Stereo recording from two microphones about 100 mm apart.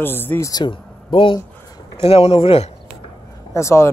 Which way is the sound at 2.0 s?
85° left.